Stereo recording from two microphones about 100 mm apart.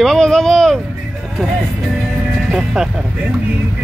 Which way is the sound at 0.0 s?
5° left (ahead or behind).